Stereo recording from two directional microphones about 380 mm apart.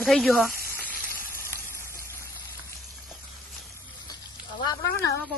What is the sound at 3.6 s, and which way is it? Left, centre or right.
Frying, centre.